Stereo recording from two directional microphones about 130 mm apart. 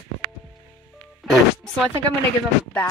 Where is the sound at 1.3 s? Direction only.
5° left (ahead or behind).